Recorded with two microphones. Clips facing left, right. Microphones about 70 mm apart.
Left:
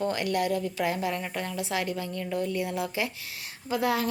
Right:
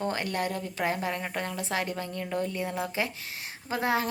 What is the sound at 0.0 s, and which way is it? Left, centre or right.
A woman's voice, right.